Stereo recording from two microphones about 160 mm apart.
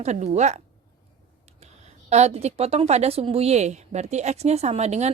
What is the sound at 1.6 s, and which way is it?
A woman's voice, 45° right (ahead or behind).